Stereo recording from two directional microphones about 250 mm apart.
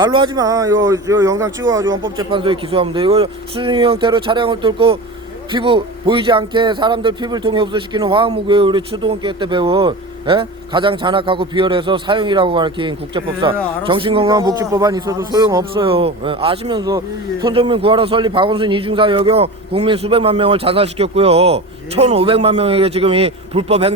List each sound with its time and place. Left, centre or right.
0.0 s a man's voice: centre